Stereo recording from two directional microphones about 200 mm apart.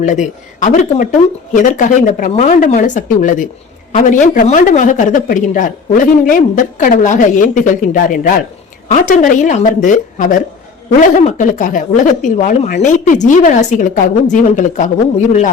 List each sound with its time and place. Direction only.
0.0 s speech: 40° left (ahead or behind)